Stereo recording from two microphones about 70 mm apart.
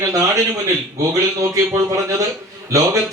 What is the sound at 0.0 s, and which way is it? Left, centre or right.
A man's voice, right.